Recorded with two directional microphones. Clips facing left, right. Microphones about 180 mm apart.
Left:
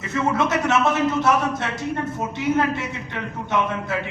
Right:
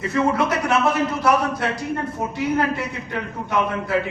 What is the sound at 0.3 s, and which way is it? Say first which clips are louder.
Speech: even; 25° left (ahead or behind).